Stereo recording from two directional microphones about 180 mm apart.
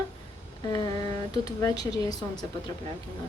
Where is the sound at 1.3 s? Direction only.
20° left (ahead or behind).